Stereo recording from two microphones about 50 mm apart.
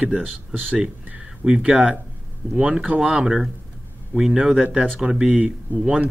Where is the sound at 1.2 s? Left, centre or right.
Centre.